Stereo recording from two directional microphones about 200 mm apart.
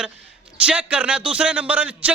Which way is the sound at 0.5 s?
5° right (ahead or behind).